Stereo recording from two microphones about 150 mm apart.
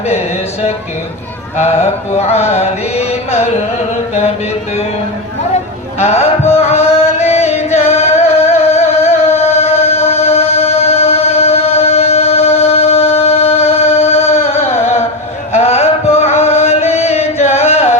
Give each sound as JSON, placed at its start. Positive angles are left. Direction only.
{"t": 1.5, "sound": "mantra", "side_deg": 50}
{"t": 6.0, "sound": "mantra", "side_deg": 45}
{"t": 6.6, "sound": "music", "side_deg": 45}
{"t": 8.4, "sound": "a sound", "side_deg": 45}
{"t": 9.0, "sound": "music", "side_deg": 15}
{"t": 9.2, "sound": "music", "side_deg": 45}
{"t": 15.5, "sound": "chant", "side_deg": 45}